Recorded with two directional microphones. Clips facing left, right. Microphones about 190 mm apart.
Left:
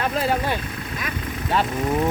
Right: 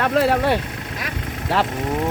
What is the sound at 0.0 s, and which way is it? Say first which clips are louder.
Speech: right 5 dB; 70° right (ahead or behind).